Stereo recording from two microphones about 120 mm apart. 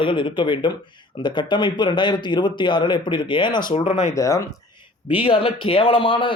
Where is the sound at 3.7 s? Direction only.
55° left (ahead or behind).